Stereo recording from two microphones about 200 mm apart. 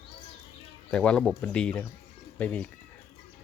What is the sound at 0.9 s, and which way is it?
Speech, 5° left (ahead or behind).